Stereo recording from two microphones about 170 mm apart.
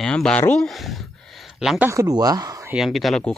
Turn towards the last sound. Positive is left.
turn(degrees=0)  # may be behind; listen again after turning